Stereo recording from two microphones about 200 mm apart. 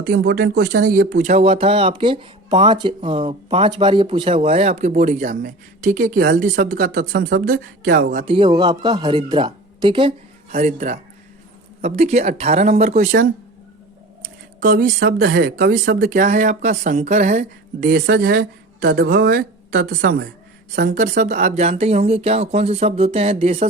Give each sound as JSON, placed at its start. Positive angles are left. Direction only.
{"t": 0.0, "sound": "speech", "side_deg": -50}
{"t": 8.2, "sound": "speech", "side_deg": -25}
{"t": 10.5, "sound": "speech", "side_deg": -35}
{"t": 14.6, "sound": "speech", "side_deg": -45}